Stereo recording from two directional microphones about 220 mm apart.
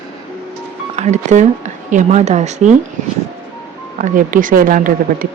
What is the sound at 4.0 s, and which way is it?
Speech, 35° right (ahead or behind).